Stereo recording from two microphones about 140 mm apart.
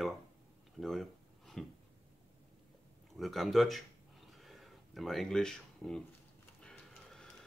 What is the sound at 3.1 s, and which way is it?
Speech, centre (ahead or behind).